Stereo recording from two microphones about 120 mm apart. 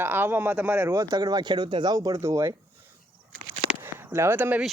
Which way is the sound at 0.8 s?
35° right (ahead or behind).